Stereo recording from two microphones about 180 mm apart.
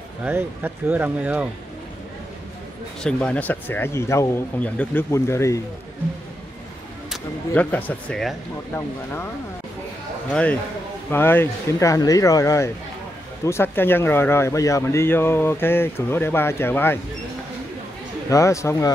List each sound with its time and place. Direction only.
0.2 s speech: 10° right (ahead or behind)
3.0 s speech: 5° left (ahead or behind)
7.1 s speech: 10° left (ahead or behind)
10.3 s speech: 5° left (ahead or behind)
18.3 s speech: 15° left (ahead or behind)